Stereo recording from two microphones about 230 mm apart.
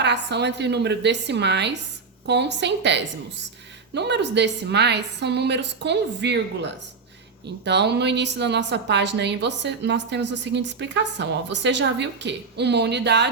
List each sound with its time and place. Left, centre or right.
0.0 s a woman's voice: right